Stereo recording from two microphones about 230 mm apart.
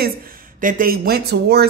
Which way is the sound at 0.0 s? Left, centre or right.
Right.